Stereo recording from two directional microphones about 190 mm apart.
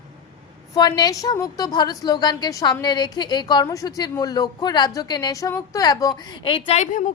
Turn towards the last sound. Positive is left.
turn(degrees=40)  # may be behind; listen again after turning